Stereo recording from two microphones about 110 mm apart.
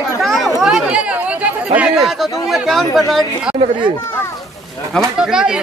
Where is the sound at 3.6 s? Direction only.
45° right (ahead or behind).